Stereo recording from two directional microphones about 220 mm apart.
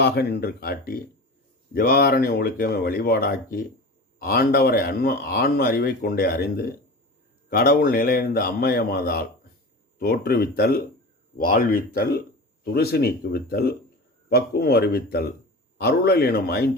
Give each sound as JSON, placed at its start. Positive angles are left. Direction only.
{"t": 0.0, "sound": "speech", "side_deg": 45}